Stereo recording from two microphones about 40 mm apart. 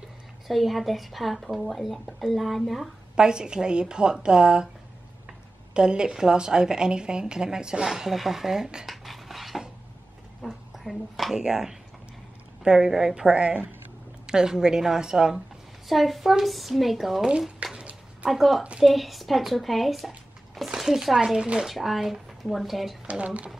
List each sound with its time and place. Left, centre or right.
0.5 s speech: centre
3.2 s a woman's voice: centre
5.8 s a woman's voice: right
8.8 s dog: centre
10.4 s a sound: centre
11.3 s a woman's voice: centre
15.9 s speech: centre
17.6 s a sound: right
18.3 s speech: centre
21.4 s a woman's voice: centre
21.6 s speech: centre
23.0 s speech: right